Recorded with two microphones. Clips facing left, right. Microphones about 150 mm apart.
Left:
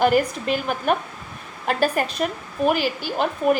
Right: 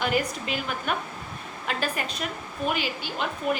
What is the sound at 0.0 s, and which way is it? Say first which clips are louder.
A woman's voice: left 8 dB; 45° left (ahead or behind).